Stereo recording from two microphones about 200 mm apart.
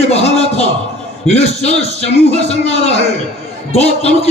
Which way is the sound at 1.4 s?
30° left (ahead or behind).